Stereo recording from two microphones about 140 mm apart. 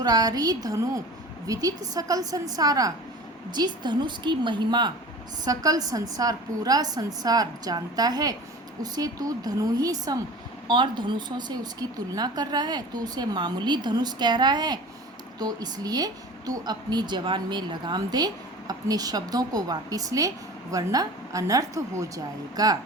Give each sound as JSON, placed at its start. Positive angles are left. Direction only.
{"t": 0.0, "sound": "a woman's voice", "side_deg": -30}